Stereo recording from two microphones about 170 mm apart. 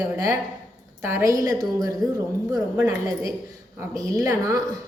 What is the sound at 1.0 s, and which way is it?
A woman's voice, 15° right (ahead or behind).